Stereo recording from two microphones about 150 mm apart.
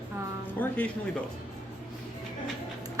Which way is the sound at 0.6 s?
10° left (ahead or behind).